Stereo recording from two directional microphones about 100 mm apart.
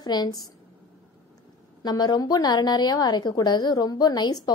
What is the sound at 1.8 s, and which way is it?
A woman's voice, 45° left (ahead or behind).